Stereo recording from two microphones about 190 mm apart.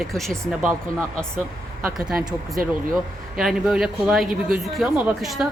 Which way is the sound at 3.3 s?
5° right (ahead or behind).